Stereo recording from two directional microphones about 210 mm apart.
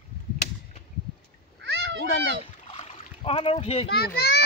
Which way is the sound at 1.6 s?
55° right (ahead or behind).